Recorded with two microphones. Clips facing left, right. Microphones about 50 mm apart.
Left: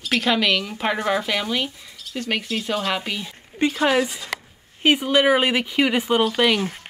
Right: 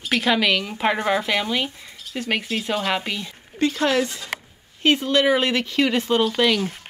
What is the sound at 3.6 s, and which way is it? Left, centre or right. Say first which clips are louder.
Speech: left 1 dB; centre.